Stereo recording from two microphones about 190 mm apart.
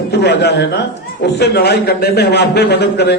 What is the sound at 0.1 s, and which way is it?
A man's voice, 60° left (ahead or behind).